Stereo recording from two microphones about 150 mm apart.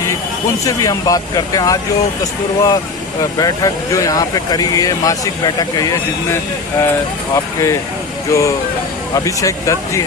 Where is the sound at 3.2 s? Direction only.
25° left (ahead or behind).